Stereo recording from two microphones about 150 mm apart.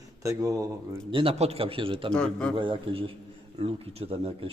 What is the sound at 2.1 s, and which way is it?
Speech, 5° left (ahead or behind).